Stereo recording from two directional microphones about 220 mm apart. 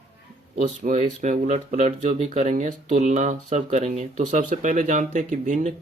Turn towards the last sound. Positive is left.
turn(degrees=-35)  # may be behind; listen again after turning